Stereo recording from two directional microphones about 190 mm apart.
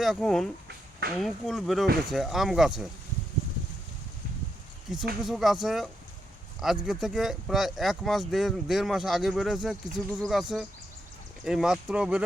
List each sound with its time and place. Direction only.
0.0 s speech: centre (ahead or behind)
0.7 s a sound: 60° right (ahead or behind)
1.2 s speech: centre (ahead or behind)
4.9 s speech: centre (ahead or behind)